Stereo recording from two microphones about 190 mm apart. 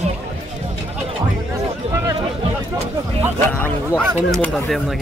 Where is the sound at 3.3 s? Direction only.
10° left (ahead or behind).